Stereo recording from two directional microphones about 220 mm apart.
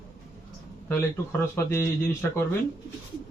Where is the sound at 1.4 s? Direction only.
10° left (ahead or behind).